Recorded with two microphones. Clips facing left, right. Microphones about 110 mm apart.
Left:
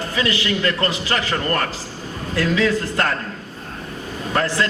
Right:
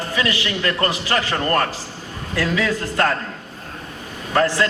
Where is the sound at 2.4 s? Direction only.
30° left (ahead or behind).